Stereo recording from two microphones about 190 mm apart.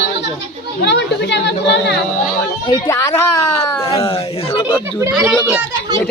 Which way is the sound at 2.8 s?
15° left (ahead or behind).